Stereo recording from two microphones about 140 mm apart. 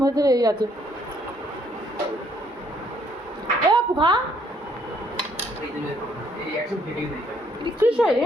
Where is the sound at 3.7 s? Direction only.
35° right (ahead or behind).